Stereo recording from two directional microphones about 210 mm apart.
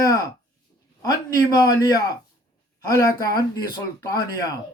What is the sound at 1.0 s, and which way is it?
Speech, 20° left (ahead or behind).